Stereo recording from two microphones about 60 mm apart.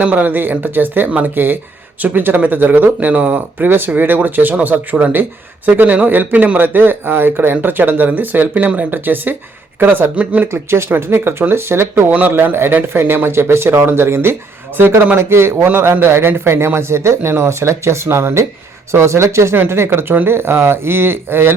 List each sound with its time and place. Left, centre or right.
0.0 s speech: right
10.5 s speech: right